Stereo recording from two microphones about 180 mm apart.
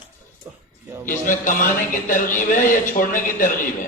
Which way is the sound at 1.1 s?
45° left (ahead or behind).